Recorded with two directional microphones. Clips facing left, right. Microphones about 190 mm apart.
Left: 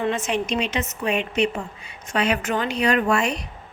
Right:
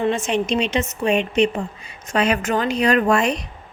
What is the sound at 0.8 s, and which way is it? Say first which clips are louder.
Speech: right 5 dB; 30° right (ahead or behind).